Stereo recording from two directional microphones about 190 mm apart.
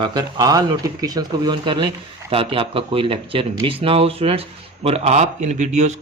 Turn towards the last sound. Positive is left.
turn(degrees=-40)  # may be behind; listen again after turning